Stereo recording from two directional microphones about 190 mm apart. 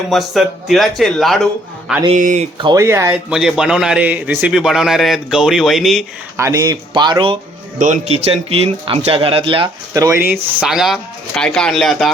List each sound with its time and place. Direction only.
0.1 s a man's voice: centre (ahead or behind)
2.1 s speech: 40° right (ahead or behind)
2.6 s a man's voice: 20° right (ahead or behind); by 6.1 s centre (ahead or behind)
6.3 s speech: 15° right (ahead or behind)
7.8 s a man's voice: 40° right (ahead or behind); by 12.1 s centre (ahead or behind)